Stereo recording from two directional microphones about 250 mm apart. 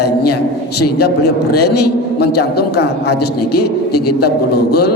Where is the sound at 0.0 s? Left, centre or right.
Left.